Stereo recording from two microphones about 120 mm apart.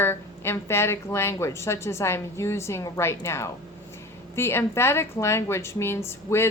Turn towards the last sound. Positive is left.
turn(degrees=20)  # may be behind; listen again after turning